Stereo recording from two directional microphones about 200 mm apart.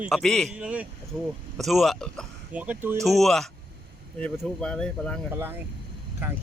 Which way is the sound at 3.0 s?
Centre (ahead or behind).